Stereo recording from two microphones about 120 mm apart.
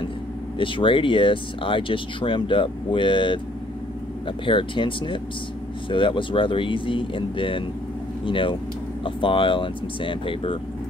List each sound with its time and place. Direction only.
0.6 s speech: 45° left (ahead or behind)
4.5 s speech: 45° left (ahead or behind)